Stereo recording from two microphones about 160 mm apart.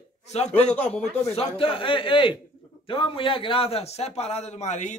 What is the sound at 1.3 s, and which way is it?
A man's voice, 35° left (ahead or behind).